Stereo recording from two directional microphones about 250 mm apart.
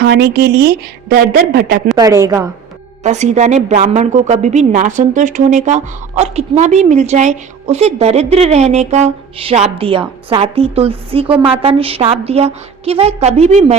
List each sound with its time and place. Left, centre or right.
0.0 s a woman's voice: right
2.0 s a woman's voice: centre
3.0 s a woman's voice: right